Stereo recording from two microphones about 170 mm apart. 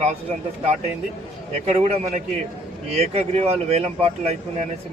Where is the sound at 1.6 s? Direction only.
40° right (ahead or behind).